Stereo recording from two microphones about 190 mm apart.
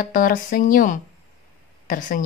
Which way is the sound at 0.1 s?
45° left (ahead or behind).